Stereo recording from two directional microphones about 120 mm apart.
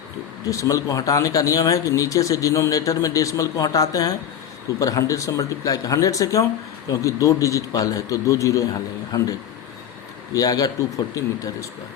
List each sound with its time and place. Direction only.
0.4 s speech: 30° left (ahead or behind)
10.3 s speech: 30° left (ahead or behind)